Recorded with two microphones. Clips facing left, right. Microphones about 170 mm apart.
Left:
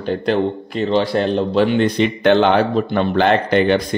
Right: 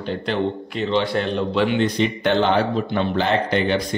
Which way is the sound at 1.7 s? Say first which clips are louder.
Left 4 dB; 65° left (ahead or behind).